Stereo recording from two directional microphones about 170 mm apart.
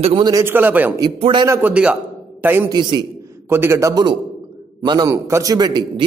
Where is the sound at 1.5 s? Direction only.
10° right (ahead or behind).